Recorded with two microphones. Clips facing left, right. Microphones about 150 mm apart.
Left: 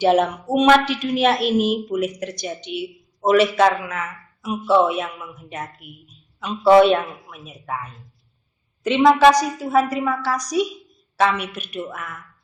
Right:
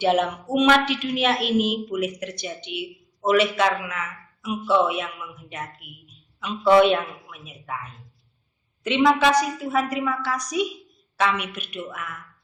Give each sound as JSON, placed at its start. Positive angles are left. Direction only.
{"t": 0.0, "sound": "a woman's voice", "side_deg": 40}
{"t": 8.8, "sound": "a woman's voice", "side_deg": 40}